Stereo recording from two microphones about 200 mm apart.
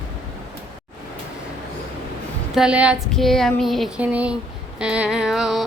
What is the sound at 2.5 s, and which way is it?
Speech, 5° right (ahead or behind).